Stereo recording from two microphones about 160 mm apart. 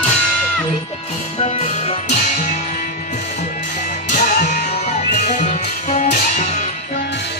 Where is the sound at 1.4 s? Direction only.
40° left (ahead or behind).